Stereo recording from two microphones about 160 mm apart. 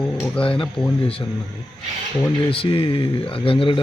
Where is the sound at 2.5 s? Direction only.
35° left (ahead or behind).